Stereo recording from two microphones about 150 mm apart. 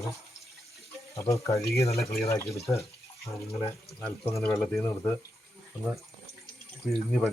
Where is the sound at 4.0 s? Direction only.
10° left (ahead or behind).